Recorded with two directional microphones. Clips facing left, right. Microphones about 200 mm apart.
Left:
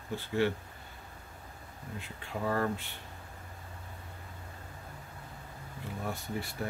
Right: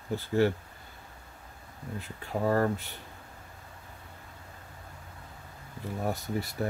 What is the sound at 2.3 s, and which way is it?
Speech, 40° right (ahead or behind).